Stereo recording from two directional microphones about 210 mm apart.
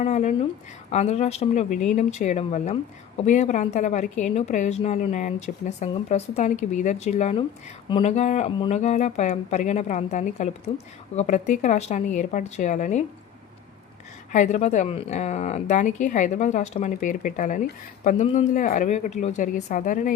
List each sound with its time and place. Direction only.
0.0 s speech: 35° left (ahead or behind)
14.3 s speech: 35° left (ahead or behind)